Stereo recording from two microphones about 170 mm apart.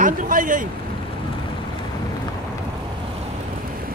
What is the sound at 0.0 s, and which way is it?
Speech, 50° right (ahead or behind).